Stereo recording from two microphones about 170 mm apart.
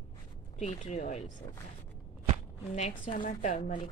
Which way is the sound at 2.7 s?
45° left (ahead or behind).